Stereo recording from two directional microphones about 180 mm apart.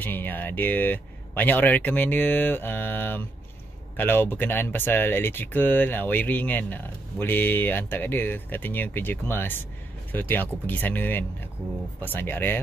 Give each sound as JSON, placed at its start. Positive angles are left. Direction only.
{"t": 0.0, "sound": "speech", "side_deg": 10}